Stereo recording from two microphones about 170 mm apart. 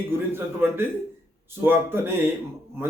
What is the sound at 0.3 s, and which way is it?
A man's voice, 15° right (ahead or behind).